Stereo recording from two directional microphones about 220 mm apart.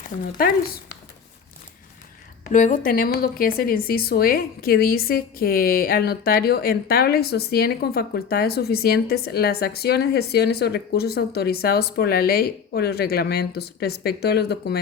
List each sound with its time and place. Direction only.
0.3 s a woman's voice: 45° left (ahead or behind)
2.5 s a woman's voice: 35° left (ahead or behind)